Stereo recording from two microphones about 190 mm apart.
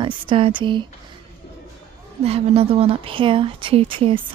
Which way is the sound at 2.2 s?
30° right (ahead or behind).